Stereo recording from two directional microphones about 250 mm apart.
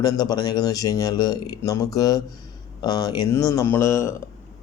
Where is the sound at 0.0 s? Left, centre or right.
Centre.